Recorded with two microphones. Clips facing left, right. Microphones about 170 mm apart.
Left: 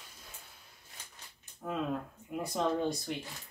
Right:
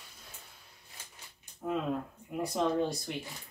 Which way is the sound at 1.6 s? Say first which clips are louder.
Right 4 dB; 10° right (ahead or behind).